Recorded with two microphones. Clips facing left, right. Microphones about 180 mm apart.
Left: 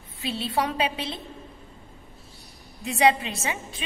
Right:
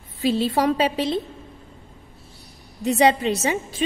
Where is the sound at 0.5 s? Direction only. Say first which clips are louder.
Right 6 dB; 35° right (ahead or behind).